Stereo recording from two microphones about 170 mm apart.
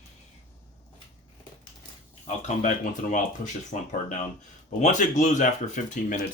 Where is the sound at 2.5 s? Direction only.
50° left (ahead or behind).